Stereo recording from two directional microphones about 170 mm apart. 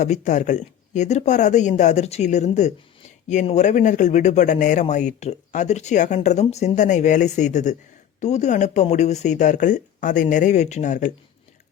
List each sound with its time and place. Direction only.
0.0 s speech: 45° left (ahead or behind)